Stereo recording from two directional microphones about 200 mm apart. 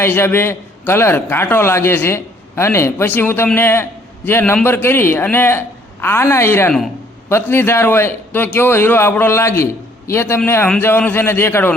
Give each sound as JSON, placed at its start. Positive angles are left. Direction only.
{"t": 0.0, "sound": "a man's voice", "side_deg": 10}